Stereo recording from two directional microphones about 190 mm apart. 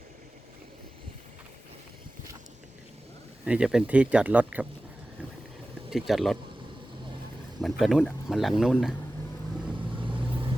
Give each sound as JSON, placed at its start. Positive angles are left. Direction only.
{"t": 3.4, "sound": "speech", "side_deg": -5}
{"t": 5.9, "sound": "speech", "side_deg": 0}
{"t": 7.6, "sound": "speech", "side_deg": 0}
{"t": 10.0, "sound": "vehicle", "side_deg": -25}